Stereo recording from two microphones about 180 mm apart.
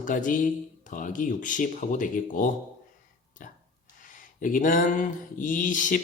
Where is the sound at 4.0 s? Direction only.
45° left (ahead or behind).